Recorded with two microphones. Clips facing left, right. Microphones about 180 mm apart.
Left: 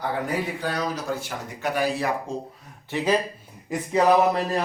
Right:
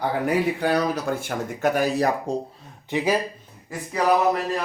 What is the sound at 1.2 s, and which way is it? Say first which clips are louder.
Speech: right 6 dB; 45° right (ahead or behind).